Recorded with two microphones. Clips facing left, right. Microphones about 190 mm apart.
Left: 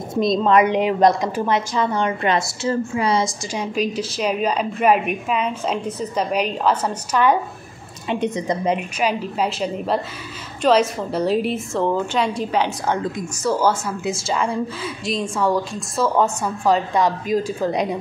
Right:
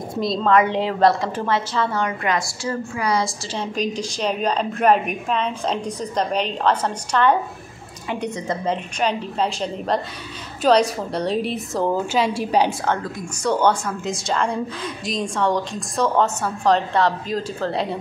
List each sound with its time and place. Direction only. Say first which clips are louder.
0.1 s a woman's voice: left 2 dB; 20° left (ahead or behind)
3.5 s a woman's voice: left 2 dB; 5° left (ahead or behind)
8.1 s a woman's voice: left 4 dB; 20° left (ahead or behind); by 12.4 s 5° right (ahead or behind)
12.8 s a woman's voice: left 2 dB; 15° left (ahead or behind)